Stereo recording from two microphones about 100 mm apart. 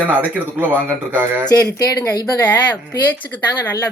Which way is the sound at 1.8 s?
35° left (ahead or behind).